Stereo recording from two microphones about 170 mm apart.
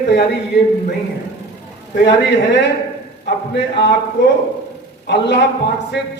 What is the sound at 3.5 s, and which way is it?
Speech, 90° left.